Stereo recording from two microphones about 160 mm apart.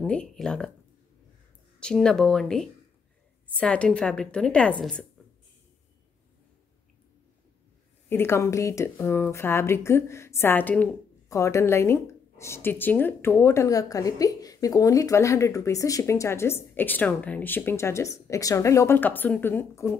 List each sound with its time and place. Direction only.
0.0 s speech: 5° left (ahead or behind)
1.8 s speech: 5° left (ahead or behind)
8.1 s speech: 15° left (ahead or behind)